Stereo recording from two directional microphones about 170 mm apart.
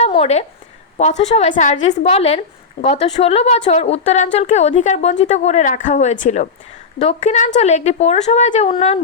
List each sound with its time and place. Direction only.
0.1 s a woman's voice: 40° left (ahead or behind)